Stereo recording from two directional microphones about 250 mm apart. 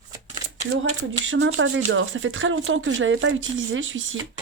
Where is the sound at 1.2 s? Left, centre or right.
Right.